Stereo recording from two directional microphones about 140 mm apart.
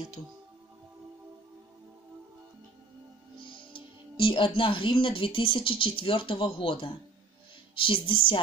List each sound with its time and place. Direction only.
3.3 s music: 35° left (ahead or behind)
4.6 s speech: 40° left (ahead or behind)